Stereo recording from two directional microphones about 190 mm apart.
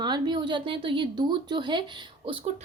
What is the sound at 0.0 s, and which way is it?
A woman's voice, 25° right (ahead or behind).